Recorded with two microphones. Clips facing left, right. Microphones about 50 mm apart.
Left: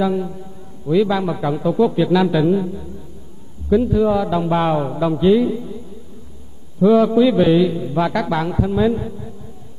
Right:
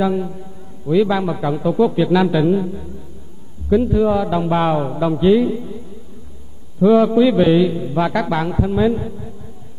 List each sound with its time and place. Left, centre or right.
0.0 s a man's voice: centre
1.2 s a man's voice: centre
5.2 s a man's voice: centre
6.8 s a man's voice: centre